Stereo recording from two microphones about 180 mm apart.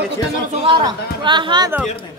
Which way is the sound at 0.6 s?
25° right (ahead or behind).